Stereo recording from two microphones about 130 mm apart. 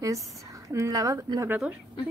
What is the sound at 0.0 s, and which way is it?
A woman's voice, 25° right (ahead or behind).